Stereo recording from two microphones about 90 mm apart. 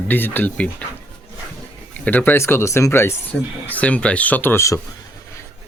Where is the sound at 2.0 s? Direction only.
20° left (ahead or behind).